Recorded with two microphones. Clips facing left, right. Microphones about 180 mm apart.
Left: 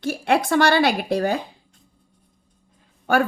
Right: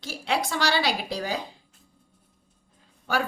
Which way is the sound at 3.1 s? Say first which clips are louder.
Left 8 dB; 55° left (ahead or behind).